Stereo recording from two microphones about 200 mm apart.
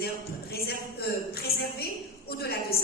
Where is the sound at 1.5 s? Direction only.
30° left (ahead or behind).